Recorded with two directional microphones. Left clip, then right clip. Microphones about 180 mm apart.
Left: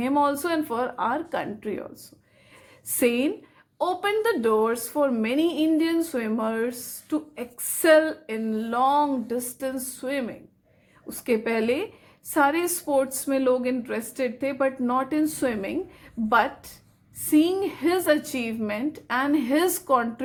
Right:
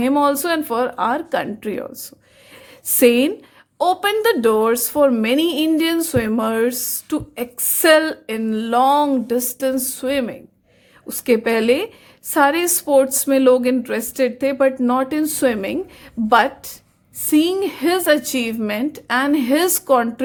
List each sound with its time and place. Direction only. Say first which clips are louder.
0.0 s a woman's voice: right 6 dB; 30° right (ahead or behind)
3.0 s a woman's voice: right 9 dB; 35° right (ahead or behind)
17.3 s a woman's voice: right 5 dB; 30° right (ahead or behind)